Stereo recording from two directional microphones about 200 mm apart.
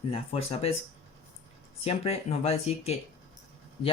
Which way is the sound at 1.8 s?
30° left (ahead or behind).